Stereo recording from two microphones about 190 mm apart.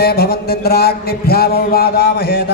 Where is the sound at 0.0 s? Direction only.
55° left (ahead or behind).